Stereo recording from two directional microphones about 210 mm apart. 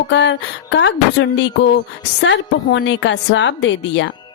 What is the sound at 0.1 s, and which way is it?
Speech, 60° left (ahead or behind).